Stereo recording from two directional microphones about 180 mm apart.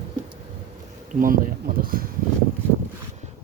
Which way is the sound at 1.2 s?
50° right (ahead or behind).